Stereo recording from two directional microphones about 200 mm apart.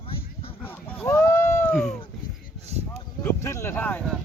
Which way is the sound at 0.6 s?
10° left (ahead or behind).